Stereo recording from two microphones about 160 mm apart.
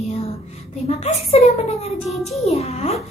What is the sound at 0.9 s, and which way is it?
A woman's voice, 40° left (ahead or behind).